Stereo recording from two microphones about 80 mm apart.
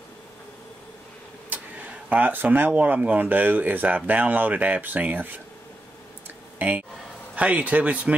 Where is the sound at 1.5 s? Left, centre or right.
Centre.